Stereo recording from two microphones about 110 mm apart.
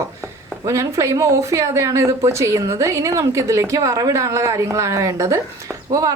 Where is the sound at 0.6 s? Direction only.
30° right (ahead or behind).